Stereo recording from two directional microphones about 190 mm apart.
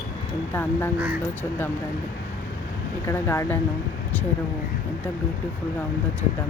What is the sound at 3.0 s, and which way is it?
Speech, 15° left (ahead or behind).